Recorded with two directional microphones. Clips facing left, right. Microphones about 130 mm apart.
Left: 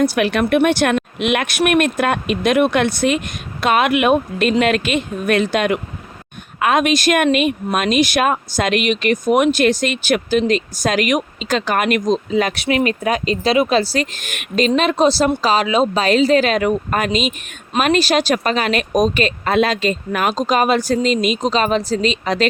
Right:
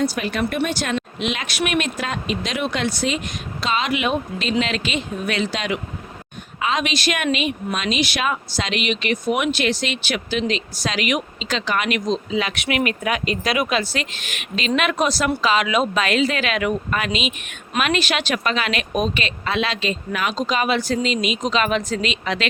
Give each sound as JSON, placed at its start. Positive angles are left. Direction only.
{"t": 0.0, "sound": "speech", "side_deg": 65}
{"t": 14.8, "sound": "speech", "side_deg": 30}